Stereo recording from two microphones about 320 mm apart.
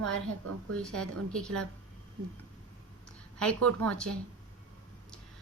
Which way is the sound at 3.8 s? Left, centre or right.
Centre.